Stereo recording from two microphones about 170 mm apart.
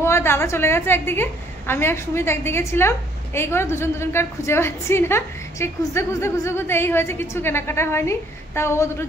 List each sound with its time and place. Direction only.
0.0 s a woman's voice: 15° left (ahead or behind)